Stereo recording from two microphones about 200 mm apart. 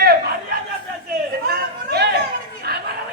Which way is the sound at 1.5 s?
50° right (ahead or behind).